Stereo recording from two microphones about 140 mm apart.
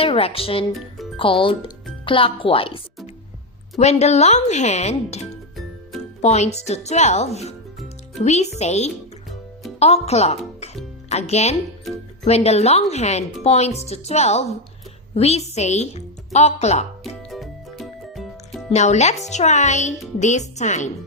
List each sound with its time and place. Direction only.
0.0 s speech: 45° left (ahead or behind)
3.8 s speech: 50° left (ahead or behind)
17.2 s music: centre (ahead or behind)
18.7 s a child's voice: 55° left (ahead or behind)